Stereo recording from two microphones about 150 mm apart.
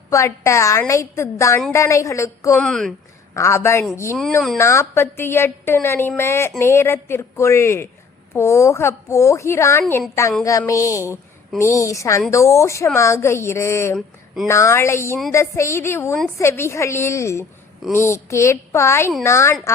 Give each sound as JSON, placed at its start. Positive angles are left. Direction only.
{"t": 0.1, "sound": "a woman's voice", "side_deg": 20}
{"t": 2.6, "sound": "speech", "side_deg": 5}
{"t": 3.3, "sound": "a woman's voice", "side_deg": 20}